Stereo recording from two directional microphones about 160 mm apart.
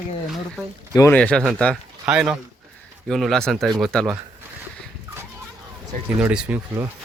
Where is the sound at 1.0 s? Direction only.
10° left (ahead or behind).